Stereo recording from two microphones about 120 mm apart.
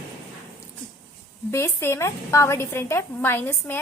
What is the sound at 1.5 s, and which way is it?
Speech, 20° left (ahead or behind).